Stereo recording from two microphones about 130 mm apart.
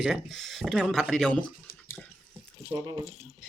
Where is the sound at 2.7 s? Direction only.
30° right (ahead or behind).